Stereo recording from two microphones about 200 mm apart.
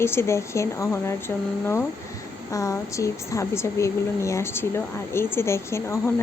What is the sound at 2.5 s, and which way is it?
A woman's voice, 15° left (ahead or behind).